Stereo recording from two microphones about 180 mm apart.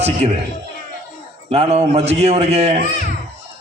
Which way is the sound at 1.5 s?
35° right (ahead or behind).